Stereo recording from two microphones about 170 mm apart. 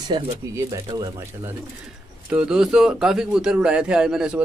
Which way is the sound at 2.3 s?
5° right (ahead or behind).